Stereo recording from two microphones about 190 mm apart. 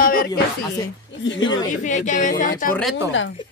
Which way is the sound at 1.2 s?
75° left (ahead or behind).